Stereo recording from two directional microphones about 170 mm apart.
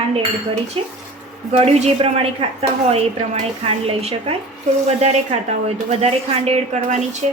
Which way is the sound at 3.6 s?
35° right (ahead or behind).